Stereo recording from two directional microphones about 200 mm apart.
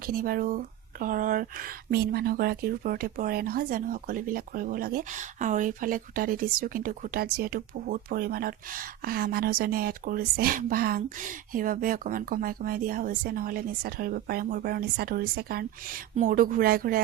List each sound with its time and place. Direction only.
0.0 s speech: 45° right (ahead or behind)